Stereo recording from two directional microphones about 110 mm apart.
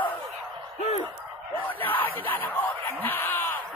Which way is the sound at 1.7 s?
15° left (ahead or behind).